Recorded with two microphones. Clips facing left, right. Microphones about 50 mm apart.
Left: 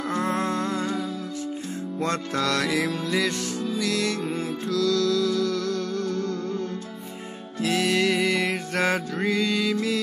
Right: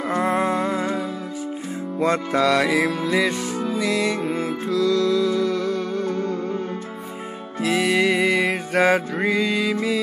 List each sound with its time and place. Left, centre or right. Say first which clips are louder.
0.1 s music: right 5 dB; centre
7.6 s music: right 3 dB; centre
7.9 s music: right 5 dB; centre